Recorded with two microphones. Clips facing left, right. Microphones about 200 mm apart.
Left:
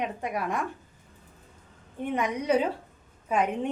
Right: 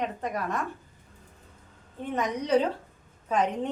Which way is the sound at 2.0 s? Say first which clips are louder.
Left 1 dB; 10° left (ahead or behind).